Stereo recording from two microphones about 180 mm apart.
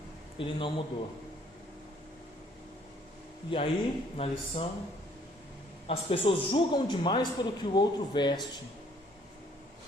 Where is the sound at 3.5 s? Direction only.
30° left (ahead or behind).